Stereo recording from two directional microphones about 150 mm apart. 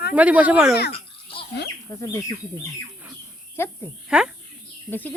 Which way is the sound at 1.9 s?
25° left (ahead or behind).